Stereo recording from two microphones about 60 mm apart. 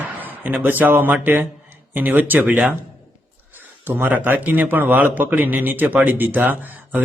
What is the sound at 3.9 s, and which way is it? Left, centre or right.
A man's voice, right.